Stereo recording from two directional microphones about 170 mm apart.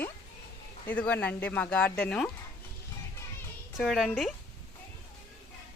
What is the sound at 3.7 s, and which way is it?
Speech, centre (ahead or behind).